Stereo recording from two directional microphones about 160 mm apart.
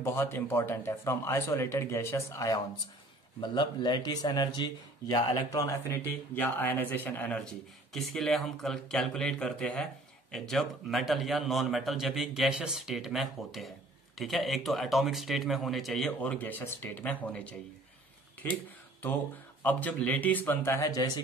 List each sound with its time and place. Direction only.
0.0 s speech: 15° left (ahead or behind)
18.4 s a sound: 10° left (ahead or behind)
19.6 s speech: 10° left (ahead or behind)